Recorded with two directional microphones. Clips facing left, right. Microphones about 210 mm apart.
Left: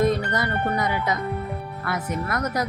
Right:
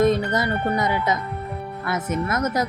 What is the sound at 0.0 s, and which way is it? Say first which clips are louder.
Speech: right 3 dB; 25° right (ahead or behind).